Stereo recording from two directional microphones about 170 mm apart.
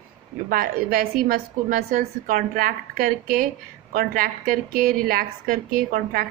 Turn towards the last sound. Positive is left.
turn(degrees=-55)  # may be behind; listen again after turning